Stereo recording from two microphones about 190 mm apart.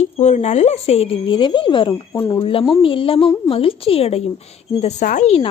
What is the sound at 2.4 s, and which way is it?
A woman's voice, 30° left (ahead or behind).